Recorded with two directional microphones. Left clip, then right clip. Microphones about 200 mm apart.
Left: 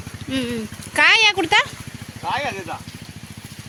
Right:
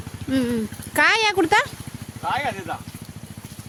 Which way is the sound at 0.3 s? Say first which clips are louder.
Right 2 dB; 30° right (ahead or behind).